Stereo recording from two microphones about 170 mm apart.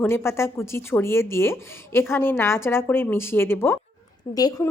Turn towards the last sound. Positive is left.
turn(degrees=20)  # may be behind; listen again after turning